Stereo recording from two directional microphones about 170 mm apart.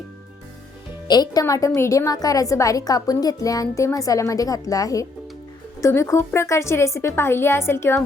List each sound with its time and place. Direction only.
1.0 s a woman's voice: 25° left (ahead or behind)